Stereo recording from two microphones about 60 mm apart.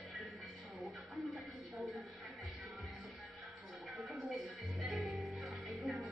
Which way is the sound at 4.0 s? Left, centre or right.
Centre.